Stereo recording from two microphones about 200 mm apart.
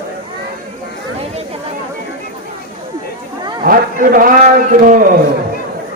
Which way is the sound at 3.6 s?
45° right (ahead or behind).